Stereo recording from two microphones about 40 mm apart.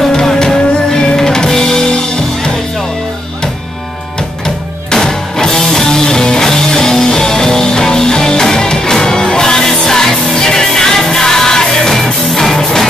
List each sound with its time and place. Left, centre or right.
0.0 s music: centre
4.9 s music: centre